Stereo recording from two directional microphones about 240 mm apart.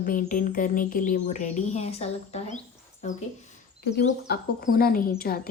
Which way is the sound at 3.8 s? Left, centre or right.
Left.